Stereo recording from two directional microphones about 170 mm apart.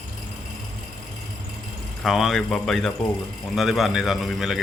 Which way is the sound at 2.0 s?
Centre (ahead or behind).